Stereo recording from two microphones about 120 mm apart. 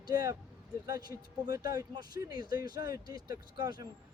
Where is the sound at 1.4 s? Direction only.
30° right (ahead or behind).